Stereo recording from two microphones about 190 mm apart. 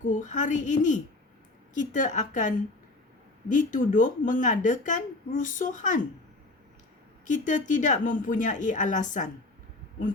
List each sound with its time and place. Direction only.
0.0 s a woman's voice: 40° left (ahead or behind)
3.5 s a woman's voice: 45° left (ahead or behind)
7.3 s a woman's voice: 40° left (ahead or behind)